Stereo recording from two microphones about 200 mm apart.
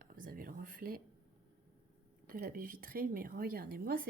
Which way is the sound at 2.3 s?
45° right (ahead or behind).